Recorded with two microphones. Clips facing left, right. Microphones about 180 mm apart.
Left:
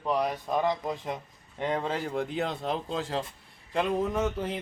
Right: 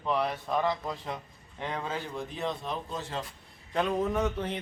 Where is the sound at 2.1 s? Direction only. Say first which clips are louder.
Left 4 dB; 70° left (ahead or behind); by 3.0 s 90° left.